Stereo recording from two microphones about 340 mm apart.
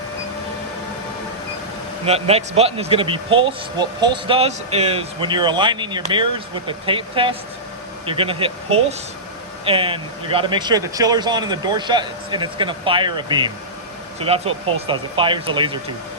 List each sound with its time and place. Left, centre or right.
2.0 s speech: centre